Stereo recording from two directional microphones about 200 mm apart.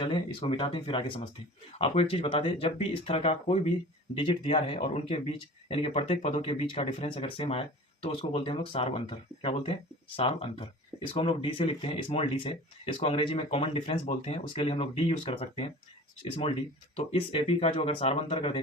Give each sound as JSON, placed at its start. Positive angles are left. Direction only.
{"t": 0.0, "sound": "speech", "side_deg": 25}